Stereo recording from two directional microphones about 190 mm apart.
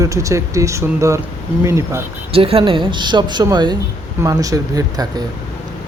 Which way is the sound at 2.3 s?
30° right (ahead or behind).